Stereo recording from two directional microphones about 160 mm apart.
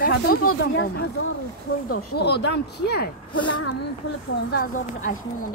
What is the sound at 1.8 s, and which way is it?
Speech, 90° left.